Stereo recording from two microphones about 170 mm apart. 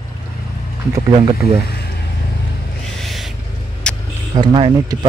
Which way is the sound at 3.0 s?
Centre (ahead or behind).